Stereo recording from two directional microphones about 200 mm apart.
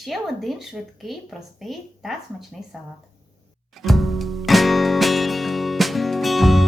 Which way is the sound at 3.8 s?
Centre (ahead or behind).